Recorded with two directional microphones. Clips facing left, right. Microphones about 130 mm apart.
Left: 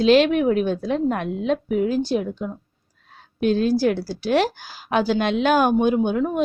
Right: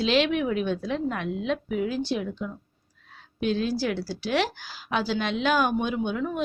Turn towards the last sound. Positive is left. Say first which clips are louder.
# left 7 dB
turn(degrees=45)  # may be behind; listen again after turning